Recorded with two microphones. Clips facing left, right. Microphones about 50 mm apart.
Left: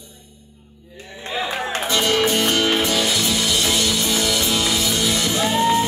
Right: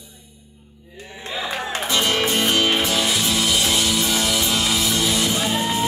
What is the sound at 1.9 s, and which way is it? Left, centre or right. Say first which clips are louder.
Music: left 2 dB; centre.